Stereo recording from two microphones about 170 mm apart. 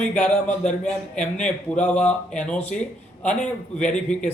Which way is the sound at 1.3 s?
5° left (ahead or behind).